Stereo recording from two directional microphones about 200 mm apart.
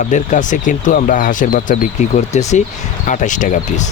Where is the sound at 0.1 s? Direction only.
40° left (ahead or behind).